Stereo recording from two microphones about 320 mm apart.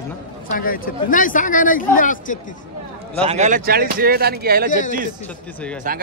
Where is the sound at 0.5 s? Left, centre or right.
Left.